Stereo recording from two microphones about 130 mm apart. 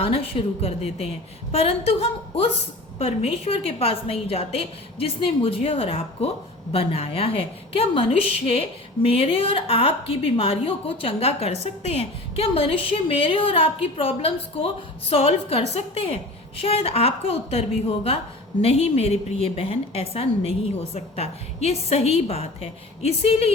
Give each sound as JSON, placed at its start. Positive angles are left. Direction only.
{"t": 0.0, "sound": "a woman's voice", "side_deg": 45}